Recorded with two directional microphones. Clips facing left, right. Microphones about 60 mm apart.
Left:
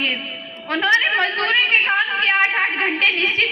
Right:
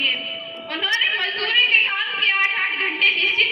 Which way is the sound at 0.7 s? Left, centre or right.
Left.